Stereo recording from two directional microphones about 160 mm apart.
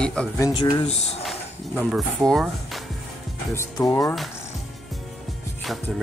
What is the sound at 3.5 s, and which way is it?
Speech, 15° left (ahead or behind).